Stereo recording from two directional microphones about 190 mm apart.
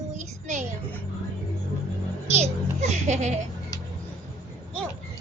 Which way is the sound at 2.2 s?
35° right (ahead or behind).